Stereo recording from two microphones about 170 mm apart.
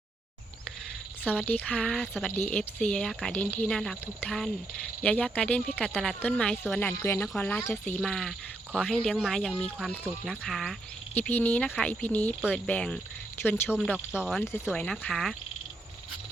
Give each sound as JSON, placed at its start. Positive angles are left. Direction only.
{"t": 1.2, "sound": "speech", "side_deg": -5}
{"t": 1.5, "sound": "speech", "side_deg": 10}
{"t": 11.2, "sound": "speech", "side_deg": 10}
{"t": 13.7, "sound": "speech", "side_deg": -5}
{"t": 14.3, "sound": "speech", "side_deg": 15}
{"t": 14.7, "sound": "speech", "side_deg": 5}